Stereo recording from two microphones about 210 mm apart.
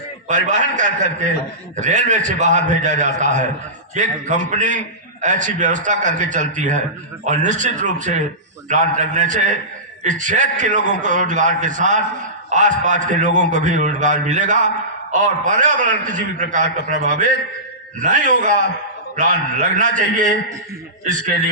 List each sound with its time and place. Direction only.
0.3 s a man's voice: 35° right (ahead or behind)